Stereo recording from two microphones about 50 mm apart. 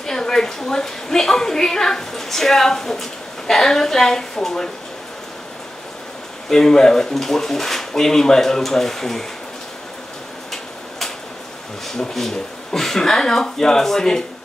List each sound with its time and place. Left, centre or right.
0.0 s a woman's voice: centre
6.5 s speech: centre
11.9 s speech: centre